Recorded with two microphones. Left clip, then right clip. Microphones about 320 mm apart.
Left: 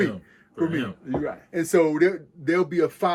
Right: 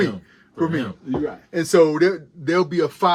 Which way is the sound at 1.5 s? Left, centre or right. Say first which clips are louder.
Right 5 dB; centre.